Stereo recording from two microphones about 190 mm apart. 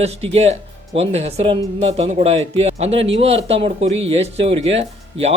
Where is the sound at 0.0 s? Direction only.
35° right (ahead or behind).